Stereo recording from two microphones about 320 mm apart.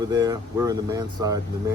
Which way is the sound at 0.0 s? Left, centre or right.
Centre.